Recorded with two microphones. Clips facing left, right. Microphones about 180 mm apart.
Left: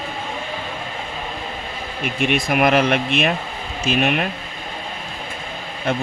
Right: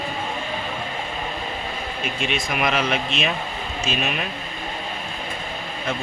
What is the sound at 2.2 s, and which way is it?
Speech, 55° left (ahead or behind).